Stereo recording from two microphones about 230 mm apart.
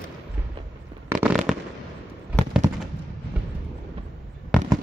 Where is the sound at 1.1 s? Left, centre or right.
Centre.